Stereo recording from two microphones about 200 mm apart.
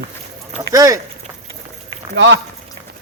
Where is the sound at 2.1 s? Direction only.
65° right (ahead or behind).